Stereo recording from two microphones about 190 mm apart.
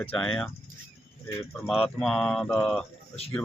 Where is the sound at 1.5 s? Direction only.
5° left (ahead or behind).